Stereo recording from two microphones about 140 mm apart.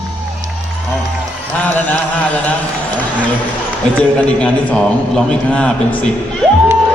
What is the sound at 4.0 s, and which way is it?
A man's voice, 10° left (ahead or behind).